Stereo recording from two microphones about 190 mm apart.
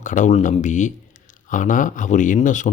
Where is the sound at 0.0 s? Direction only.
40° left (ahead or behind).